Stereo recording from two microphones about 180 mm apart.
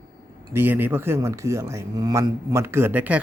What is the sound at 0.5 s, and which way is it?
Speech, 10° right (ahead or behind).